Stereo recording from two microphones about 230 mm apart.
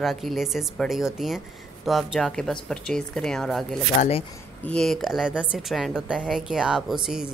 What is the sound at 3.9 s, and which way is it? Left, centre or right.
Speech, left.